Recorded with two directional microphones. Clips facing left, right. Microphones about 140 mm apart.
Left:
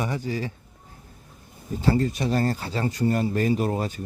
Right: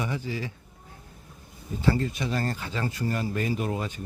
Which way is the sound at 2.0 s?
40° left (ahead or behind).